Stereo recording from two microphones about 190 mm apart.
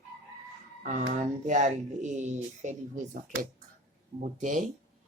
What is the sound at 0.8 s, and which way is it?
Speech, 45° right (ahead or behind).